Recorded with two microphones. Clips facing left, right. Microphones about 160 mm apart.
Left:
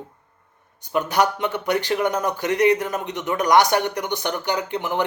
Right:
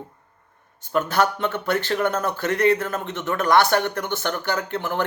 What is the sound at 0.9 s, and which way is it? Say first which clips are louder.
Speech: left 1 dB; 15° left (ahead or behind).